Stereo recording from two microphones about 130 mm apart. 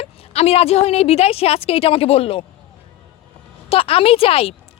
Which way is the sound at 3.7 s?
45° left (ahead or behind).